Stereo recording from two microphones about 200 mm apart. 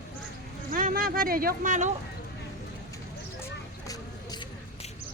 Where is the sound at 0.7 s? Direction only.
45° right (ahead or behind).